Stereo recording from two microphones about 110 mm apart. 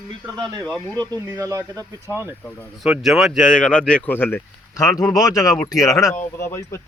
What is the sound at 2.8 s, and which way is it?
Speech, centre (ahead or behind).